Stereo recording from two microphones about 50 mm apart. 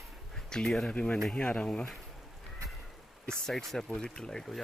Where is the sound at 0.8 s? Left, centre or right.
Left.